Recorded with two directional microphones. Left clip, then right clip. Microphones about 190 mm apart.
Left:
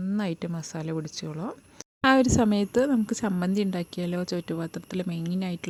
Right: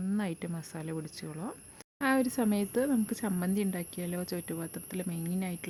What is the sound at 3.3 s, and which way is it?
Speech, 15° left (ahead or behind).